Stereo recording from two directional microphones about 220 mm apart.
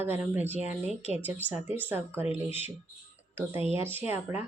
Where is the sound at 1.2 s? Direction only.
10° right (ahead or behind).